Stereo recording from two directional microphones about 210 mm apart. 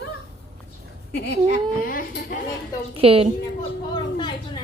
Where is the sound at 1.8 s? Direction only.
40° left (ahead or behind).